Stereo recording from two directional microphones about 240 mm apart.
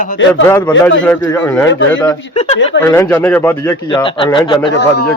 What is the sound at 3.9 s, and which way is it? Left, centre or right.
Speech, centre.